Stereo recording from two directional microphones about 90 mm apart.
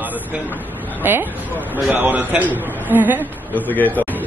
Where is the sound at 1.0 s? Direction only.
25° right (ahead or behind).